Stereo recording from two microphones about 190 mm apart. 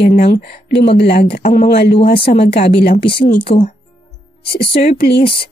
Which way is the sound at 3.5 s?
30° left (ahead or behind).